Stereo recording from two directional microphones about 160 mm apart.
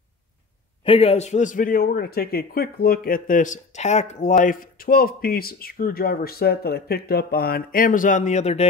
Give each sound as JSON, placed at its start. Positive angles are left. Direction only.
{"t": 0.8, "sound": "a man's voice", "side_deg": 35}